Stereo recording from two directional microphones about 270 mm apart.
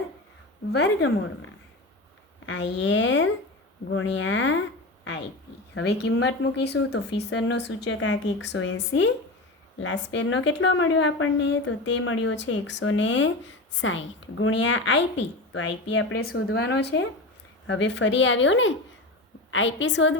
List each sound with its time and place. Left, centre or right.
0.7 s speech: left
2.5 s a woman's voice: left
5.7 s a woman's voice: left